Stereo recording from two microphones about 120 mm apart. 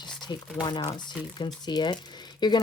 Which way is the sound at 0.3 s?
35° left (ahead or behind).